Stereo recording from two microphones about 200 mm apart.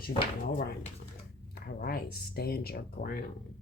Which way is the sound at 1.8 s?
50° left (ahead or behind).